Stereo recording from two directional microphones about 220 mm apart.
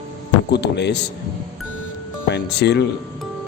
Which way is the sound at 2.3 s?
50° left (ahead or behind).